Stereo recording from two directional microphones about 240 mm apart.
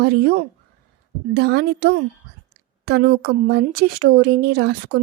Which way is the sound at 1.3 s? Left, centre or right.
Right.